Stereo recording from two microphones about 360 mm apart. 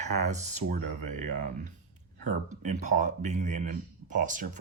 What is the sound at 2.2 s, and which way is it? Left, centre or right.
Speech, right.